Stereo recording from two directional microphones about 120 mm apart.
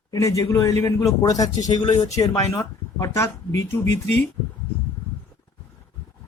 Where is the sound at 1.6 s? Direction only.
35° left (ahead or behind).